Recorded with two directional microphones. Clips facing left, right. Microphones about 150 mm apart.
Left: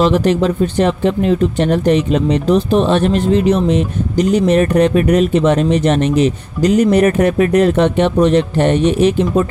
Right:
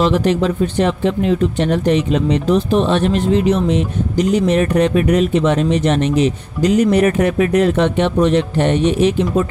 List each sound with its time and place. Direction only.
0.0 s speech: 40° left (ahead or behind)